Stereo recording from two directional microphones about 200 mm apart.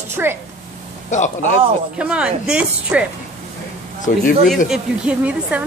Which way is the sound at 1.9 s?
5° right (ahead or behind).